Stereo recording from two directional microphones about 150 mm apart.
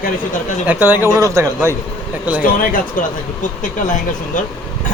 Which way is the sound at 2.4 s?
70° left (ahead or behind).